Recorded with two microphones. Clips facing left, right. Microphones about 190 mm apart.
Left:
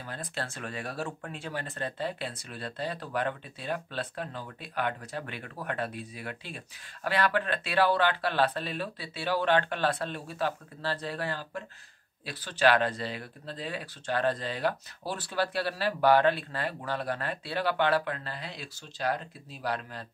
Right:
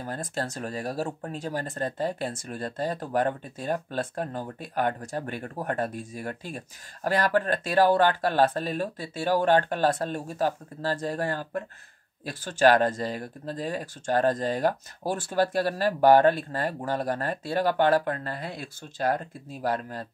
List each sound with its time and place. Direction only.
0.0 s speech: 45° right (ahead or behind)